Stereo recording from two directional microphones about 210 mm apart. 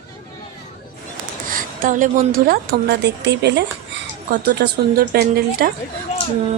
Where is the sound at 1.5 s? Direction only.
40° right (ahead or behind).